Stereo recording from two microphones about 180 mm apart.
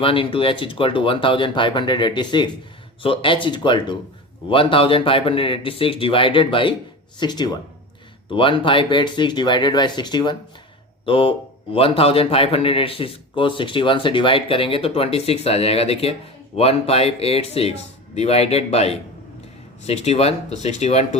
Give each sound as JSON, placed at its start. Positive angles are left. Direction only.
{"t": 0.0, "sound": "a man's voice", "side_deg": 30}